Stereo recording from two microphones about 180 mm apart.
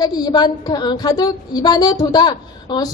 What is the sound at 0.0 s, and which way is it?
A woman's voice, 25° left (ahead or behind).